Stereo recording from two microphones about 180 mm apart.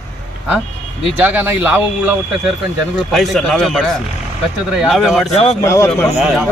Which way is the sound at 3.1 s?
Centre (ahead or behind).